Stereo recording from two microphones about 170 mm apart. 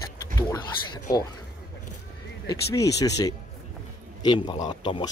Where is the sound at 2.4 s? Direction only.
20° left (ahead or behind).